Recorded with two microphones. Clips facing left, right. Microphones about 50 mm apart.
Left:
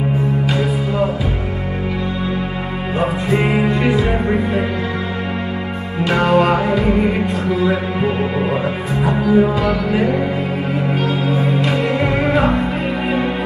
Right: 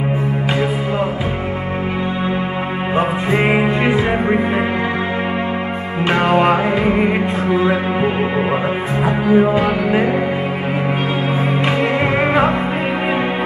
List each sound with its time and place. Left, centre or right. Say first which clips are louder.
3.3 s music: even; right
6.0 s music: even; right
11.6 s music: right 1 dB; right